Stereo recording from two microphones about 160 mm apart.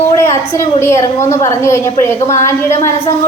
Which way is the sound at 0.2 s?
15° left (ahead or behind).